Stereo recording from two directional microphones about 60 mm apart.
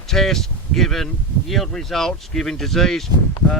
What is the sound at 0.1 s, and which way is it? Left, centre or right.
Speech, centre.